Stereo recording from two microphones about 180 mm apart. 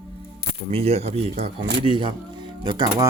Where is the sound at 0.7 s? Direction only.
35° right (ahead or behind).